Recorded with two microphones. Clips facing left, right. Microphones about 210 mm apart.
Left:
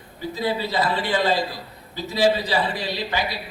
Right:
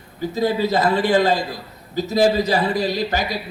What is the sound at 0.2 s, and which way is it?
A man's voice, 45° right (ahead or behind).